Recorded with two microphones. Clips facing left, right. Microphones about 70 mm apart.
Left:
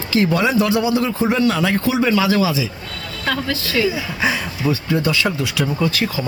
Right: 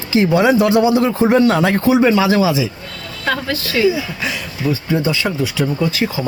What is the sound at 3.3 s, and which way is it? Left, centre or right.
Speech, centre.